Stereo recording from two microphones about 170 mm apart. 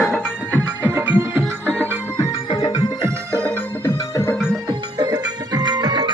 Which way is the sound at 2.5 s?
25° left (ahead or behind).